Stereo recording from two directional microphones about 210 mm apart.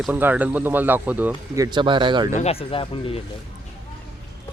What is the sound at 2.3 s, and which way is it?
Speech, 30° left (ahead or behind).